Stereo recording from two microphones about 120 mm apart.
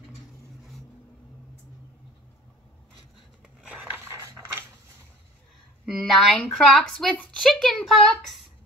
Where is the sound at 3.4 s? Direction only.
5° right (ahead or behind).